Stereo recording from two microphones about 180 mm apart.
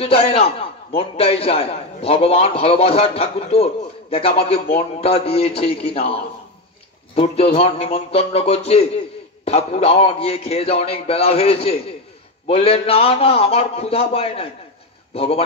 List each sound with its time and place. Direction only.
0.0 s a man's voice: 30° left (ahead or behind)